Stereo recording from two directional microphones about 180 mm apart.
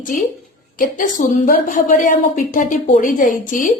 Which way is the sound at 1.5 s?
50° left (ahead or behind).